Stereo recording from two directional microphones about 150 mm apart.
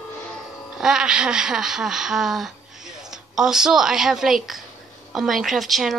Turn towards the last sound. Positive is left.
turn(degrees=0)  # may be behind; listen again after turning